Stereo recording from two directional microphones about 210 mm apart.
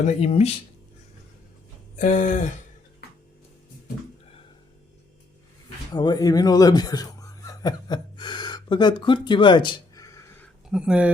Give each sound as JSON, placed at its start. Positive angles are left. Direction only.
{"t": 0.0, "sound": "speech", "side_deg": 30}
{"t": 2.0, "sound": "a sound", "side_deg": 35}
{"t": 5.9, "sound": "speech", "side_deg": 20}
{"t": 10.7, "sound": "speech", "side_deg": -5}